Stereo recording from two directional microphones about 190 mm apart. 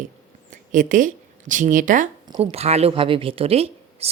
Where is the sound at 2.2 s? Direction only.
25° right (ahead or behind).